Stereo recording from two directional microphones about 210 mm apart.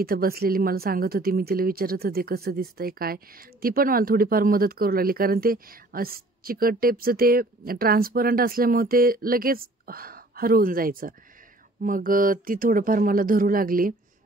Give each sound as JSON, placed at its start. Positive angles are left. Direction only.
{"t": 0.0, "sound": "a woman's voice", "side_deg": -45}